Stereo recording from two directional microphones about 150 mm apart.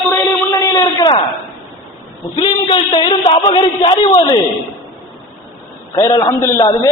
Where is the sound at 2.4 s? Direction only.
35° left (ahead or behind).